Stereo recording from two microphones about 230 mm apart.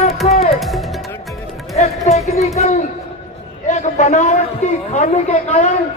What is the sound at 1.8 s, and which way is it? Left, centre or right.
A man's voice, left.